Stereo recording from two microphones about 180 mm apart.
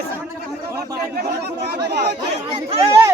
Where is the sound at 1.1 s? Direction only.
60° right (ahead or behind).